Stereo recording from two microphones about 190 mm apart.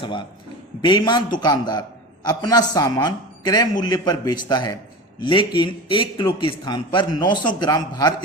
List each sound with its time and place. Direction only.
0.0 s a man's voice: 25° left (ahead or behind)